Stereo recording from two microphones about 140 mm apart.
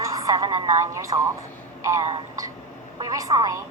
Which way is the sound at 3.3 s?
35° right (ahead or behind).